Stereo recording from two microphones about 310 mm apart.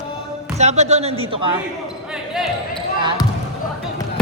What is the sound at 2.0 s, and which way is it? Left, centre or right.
Basketball bounce, centre.